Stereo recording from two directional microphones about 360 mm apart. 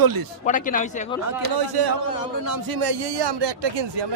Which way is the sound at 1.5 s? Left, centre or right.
Right.